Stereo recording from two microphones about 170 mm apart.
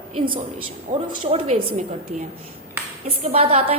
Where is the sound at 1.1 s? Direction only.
35° right (ahead or behind).